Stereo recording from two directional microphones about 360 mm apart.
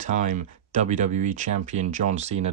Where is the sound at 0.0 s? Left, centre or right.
Centre.